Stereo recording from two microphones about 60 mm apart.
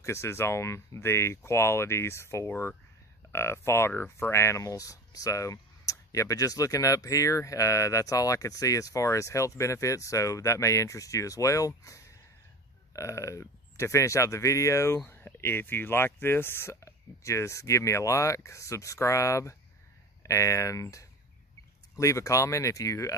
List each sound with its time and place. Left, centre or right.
0.0 s speech: left
4.7 s speech: left
15.0 s speech: left
16.8 s speech: left